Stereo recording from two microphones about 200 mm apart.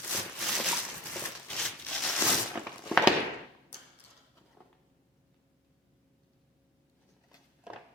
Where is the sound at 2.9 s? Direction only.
Centre (ahead or behind).